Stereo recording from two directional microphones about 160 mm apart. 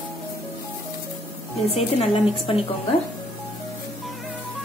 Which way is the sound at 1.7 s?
40° left (ahead or behind).